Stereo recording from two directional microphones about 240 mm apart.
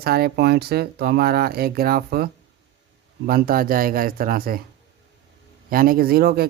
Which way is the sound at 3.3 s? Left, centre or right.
Right.